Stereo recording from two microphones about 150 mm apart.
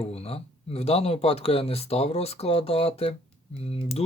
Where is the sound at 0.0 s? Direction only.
40° left (ahead or behind).